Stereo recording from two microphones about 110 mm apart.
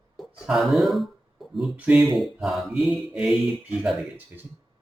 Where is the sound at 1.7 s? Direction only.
10° right (ahead or behind).